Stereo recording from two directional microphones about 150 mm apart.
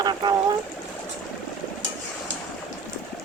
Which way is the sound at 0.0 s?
30° right (ahead or behind).